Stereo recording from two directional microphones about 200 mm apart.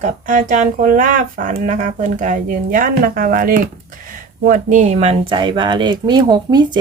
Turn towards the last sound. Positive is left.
turn(degrees=-20)  # may be behind; listen again after turning